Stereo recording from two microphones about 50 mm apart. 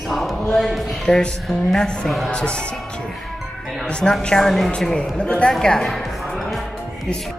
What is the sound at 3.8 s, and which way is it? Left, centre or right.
Speech, centre.